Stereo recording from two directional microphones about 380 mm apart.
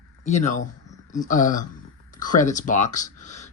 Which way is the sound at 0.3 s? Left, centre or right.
Centre.